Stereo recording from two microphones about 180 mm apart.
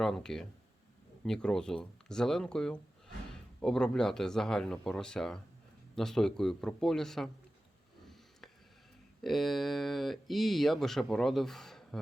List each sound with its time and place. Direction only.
0.0 s speech: centre (ahead or behind)
9.2 s speech: centre (ahead or behind)